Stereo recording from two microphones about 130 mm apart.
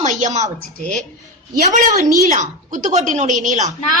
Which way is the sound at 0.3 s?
65° right (ahead or behind).